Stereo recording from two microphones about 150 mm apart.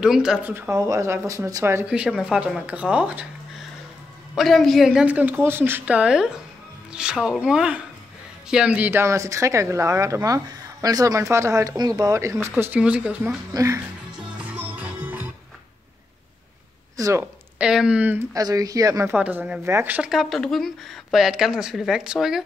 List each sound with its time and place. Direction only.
0.0 s speech: 5° right (ahead or behind)
4.4 s speech: centre (ahead or behind)
13.5 s speech: 20° right (ahead or behind)
14.4 s music: 10° right (ahead or behind)
16.9 s speech: 20° right (ahead or behind)
17.6 s speech: 5° right (ahead or behind)
18.3 s speech: 25° right (ahead or behind)
19.1 s speech: 10° right (ahead or behind)